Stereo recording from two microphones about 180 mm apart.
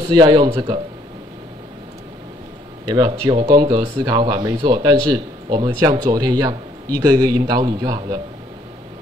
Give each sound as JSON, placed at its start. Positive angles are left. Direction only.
{"t": 0.1, "sound": "a man's voice", "side_deg": -25}
{"t": 2.8, "sound": "a man's voice", "side_deg": -25}